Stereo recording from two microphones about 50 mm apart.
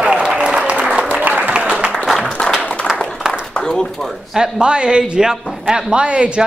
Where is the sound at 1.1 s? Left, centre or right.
Right.